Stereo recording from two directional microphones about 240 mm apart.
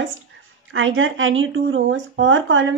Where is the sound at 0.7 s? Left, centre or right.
Right.